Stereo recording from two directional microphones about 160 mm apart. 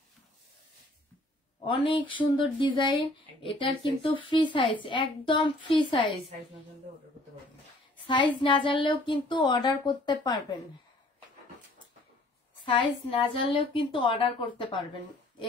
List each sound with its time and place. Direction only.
1.7 s speech: 30° left (ahead or behind)
8.1 s speech: 30° left (ahead or behind)
12.6 s speech: 30° left (ahead or behind)